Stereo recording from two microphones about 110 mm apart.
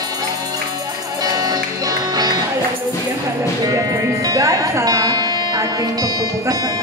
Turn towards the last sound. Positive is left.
turn(degrees=-35)  # may be behind; listen again after turning